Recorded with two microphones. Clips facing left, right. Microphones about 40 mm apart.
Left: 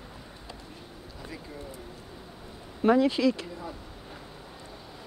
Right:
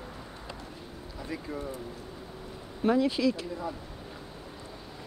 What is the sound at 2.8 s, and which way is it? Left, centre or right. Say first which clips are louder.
Speech: left 3 dB; left.